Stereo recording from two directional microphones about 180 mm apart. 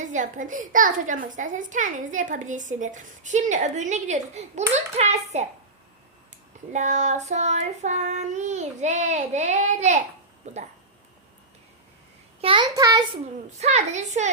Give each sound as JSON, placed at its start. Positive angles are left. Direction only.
{"t": 0.0, "sound": "a child's voice", "side_deg": -45}
{"t": 4.7, "sound": "child singing", "side_deg": -40}
{"t": 6.7, "sound": "child singing", "side_deg": -40}
{"t": 10.4, "sound": "speech", "side_deg": -40}
{"t": 12.4, "sound": "a child's voice", "side_deg": -30}
{"t": 13.6, "sound": "child singing", "side_deg": -40}